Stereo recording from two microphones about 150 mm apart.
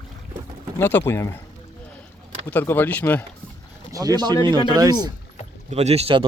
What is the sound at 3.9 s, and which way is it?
Speech, 25° right (ahead or behind).